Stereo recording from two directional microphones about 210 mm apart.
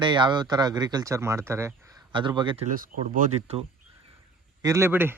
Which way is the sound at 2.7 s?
40° right (ahead or behind).